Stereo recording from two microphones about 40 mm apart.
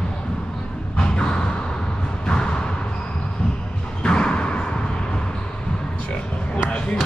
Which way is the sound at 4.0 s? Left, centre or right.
Left.